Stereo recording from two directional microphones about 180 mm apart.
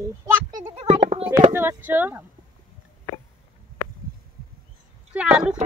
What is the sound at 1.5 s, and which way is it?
Speech, 10° right (ahead or behind).